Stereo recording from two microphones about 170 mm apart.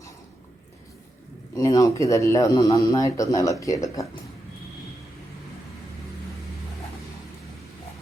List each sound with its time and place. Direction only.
1.5 s speech: 20° left (ahead or behind)